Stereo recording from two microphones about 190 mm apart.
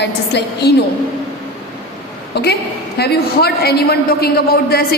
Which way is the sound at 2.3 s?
60° left (ahead or behind).